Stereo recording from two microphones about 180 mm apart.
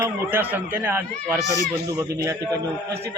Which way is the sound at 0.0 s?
10° right (ahead or behind).